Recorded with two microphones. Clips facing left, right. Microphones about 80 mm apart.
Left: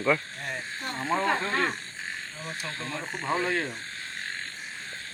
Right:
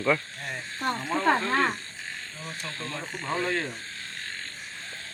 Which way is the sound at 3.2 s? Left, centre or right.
Centre.